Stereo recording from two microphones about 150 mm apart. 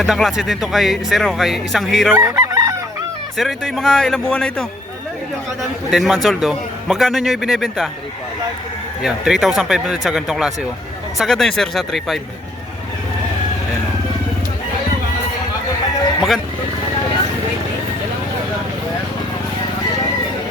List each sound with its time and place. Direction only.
0.0 s speech: centre (ahead or behind)
2.1 s chicken: 20° right (ahead or behind)
3.3 s speech: centre (ahead or behind)
5.9 s speech: centre (ahead or behind)
9.0 s speech: 5° right (ahead or behind)